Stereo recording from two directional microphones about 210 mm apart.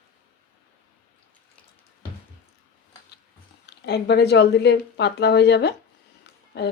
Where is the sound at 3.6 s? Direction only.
50° left (ahead or behind).